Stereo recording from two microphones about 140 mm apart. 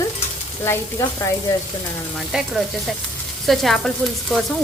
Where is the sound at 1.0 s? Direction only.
25° left (ahead or behind).